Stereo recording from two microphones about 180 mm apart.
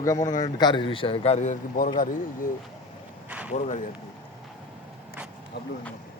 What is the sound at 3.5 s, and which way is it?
Speech, 40° left (ahead or behind).